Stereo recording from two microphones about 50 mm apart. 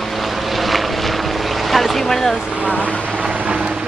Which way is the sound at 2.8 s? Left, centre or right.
Left.